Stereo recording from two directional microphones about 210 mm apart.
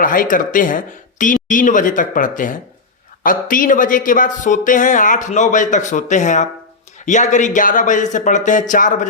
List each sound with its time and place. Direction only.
0.0 s speech: 40° left (ahead or behind)